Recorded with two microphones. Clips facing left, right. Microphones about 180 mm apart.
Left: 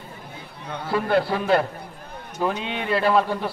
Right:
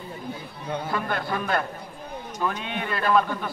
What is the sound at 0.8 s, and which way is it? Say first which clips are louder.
A man's voice: left 10 dB; 30° left (ahead or behind).